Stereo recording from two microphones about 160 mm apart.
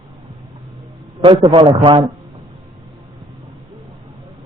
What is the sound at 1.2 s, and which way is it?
Speech, 30° right (ahead or behind).